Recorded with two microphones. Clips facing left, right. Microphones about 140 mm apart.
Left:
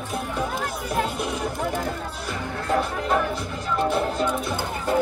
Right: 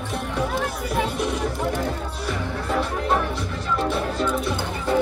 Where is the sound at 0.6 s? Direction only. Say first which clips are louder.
Right 1 dB; centre (ahead or behind).